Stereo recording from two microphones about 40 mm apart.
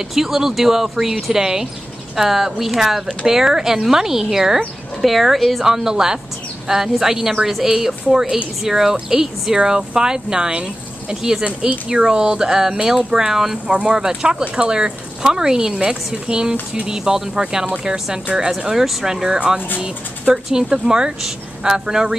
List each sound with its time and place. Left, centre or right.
0.1 s speech: centre
13.7 s speech: right
19.3 s speech: right